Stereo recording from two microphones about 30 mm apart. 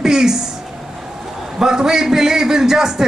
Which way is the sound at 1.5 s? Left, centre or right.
Centre.